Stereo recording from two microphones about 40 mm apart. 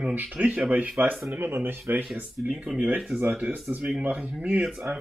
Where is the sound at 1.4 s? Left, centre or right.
Right.